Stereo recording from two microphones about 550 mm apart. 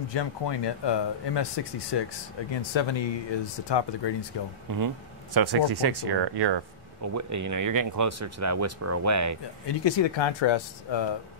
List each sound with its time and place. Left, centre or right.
0.1 s speech: left
4.6 s speech: right
7.0 s speech: right
9.7 s speech: left